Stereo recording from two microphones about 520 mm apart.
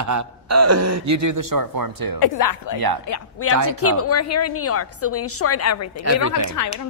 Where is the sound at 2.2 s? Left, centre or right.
Left.